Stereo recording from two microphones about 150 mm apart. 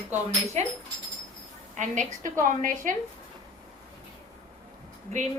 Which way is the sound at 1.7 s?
55° right (ahead or behind).